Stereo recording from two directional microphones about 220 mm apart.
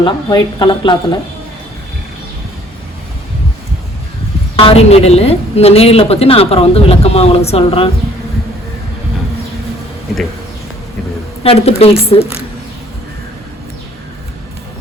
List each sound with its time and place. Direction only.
0.0 s a woman's voice: 20° left (ahead or behind)
4.5 s a woman's voice: 25° left (ahead or behind)
11.4 s a woman's voice: 30° left (ahead or behind)